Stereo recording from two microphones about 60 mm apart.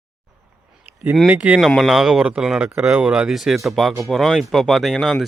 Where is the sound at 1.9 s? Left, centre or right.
Centre.